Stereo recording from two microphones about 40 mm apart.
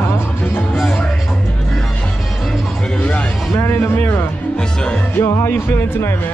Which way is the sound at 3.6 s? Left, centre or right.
Left.